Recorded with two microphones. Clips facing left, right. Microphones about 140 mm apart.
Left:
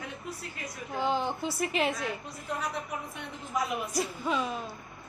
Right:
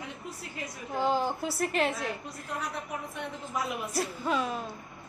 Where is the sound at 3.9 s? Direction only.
Centre (ahead or behind).